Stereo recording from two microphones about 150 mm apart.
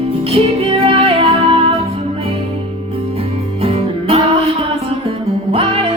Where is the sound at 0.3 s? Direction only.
40° right (ahead or behind).